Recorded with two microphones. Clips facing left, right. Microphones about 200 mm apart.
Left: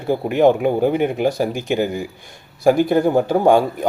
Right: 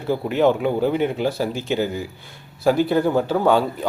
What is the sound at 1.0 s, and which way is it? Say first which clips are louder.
A man's voice: left 3 dB; 15° left (ahead or behind).